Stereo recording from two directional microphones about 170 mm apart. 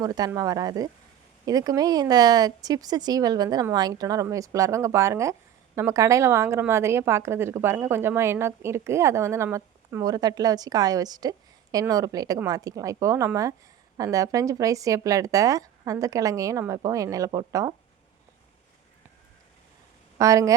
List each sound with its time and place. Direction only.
0.0 s speech: 20° right (ahead or behind)
20.1 s speech: 20° right (ahead or behind)